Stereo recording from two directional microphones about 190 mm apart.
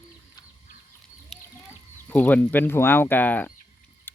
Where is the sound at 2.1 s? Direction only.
10° left (ahead or behind).